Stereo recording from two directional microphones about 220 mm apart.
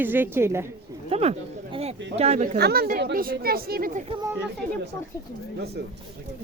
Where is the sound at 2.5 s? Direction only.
45° right (ahead or behind).